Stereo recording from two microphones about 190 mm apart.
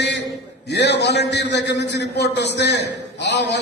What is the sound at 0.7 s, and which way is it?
A man's voice, 65° left (ahead or behind).